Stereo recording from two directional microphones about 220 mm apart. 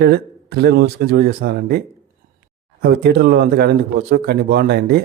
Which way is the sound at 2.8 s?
45° right (ahead or behind).